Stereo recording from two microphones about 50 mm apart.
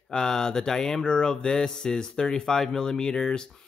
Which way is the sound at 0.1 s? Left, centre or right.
Centre.